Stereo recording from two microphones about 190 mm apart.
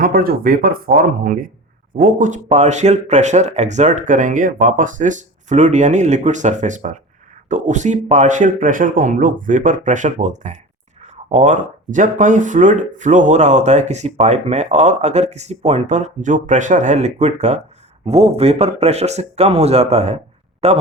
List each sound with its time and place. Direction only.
0.0 s speech: 50° right (ahead or behind); by 20.8 s 35° right (ahead or behind)